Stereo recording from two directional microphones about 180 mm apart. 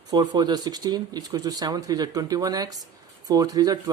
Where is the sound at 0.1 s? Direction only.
25° right (ahead or behind).